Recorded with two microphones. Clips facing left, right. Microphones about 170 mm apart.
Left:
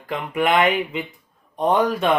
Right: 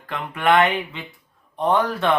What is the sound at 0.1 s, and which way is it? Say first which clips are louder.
Speech: right 1 dB; 15° left (ahead or behind).